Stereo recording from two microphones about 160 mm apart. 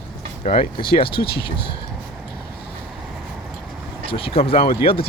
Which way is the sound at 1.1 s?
75° left (ahead or behind).